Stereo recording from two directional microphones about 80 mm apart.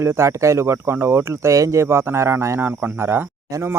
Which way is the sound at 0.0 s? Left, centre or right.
Right.